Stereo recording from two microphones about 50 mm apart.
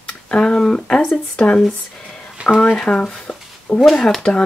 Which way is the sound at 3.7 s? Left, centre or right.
Left.